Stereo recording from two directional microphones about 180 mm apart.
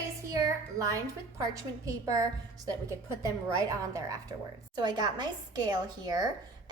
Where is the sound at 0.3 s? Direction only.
20° right (ahead or behind).